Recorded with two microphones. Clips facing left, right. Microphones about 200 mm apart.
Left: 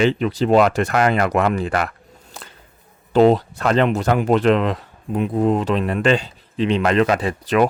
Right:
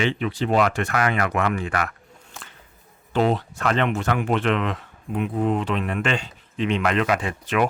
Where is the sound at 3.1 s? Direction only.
35° left (ahead or behind).